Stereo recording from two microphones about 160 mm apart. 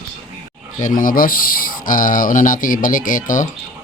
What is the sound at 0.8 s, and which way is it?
Speech, 55° left (ahead or behind).